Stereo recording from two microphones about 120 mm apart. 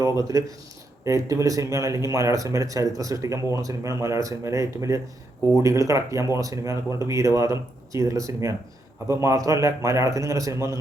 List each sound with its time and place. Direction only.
0.1 s speech: 25° right (ahead or behind)